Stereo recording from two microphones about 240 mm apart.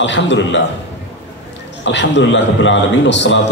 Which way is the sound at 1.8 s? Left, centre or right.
Left.